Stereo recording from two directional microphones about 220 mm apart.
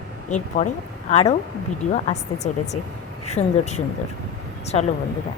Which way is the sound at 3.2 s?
30° left (ahead or behind).